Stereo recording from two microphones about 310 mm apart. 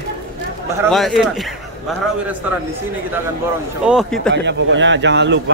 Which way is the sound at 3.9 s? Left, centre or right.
Centre.